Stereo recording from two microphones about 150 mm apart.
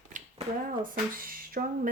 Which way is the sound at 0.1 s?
55° right (ahead or behind).